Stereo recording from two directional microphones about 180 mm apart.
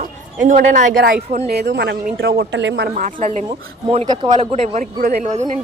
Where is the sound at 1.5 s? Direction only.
70° right (ahead or behind).